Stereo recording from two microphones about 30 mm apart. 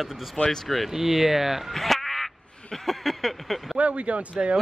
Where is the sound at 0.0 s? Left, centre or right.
Centre.